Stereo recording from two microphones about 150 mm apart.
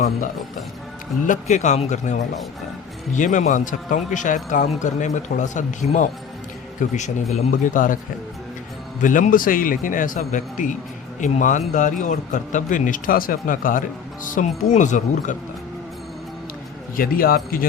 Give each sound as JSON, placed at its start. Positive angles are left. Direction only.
{"t": 1.3, "sound": "a man's voice", "side_deg": 55}
{"t": 9.0, "sound": "a man's voice", "side_deg": 60}
{"t": 17.0, "sound": "a man's voice", "side_deg": 75}